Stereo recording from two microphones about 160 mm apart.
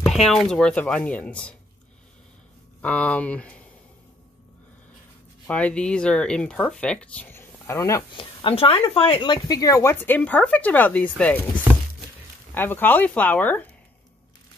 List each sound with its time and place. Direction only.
0.0 s speech: centre (ahead or behind)
2.8 s speech: 10° left (ahead or behind)
5.5 s speech: 5° left (ahead or behind)
8.1 s speech: 30° left (ahead or behind); by 11.3 s 10° left (ahead or behind)
12.5 s speech: 15° left (ahead or behind)